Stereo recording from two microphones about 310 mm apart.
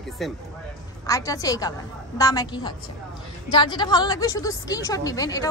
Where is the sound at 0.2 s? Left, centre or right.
Centre.